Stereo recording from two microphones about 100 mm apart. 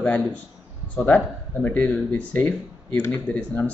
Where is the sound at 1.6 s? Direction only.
15° left (ahead or behind).